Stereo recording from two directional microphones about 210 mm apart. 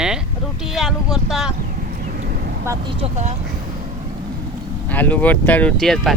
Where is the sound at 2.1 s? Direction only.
45° right (ahead or behind).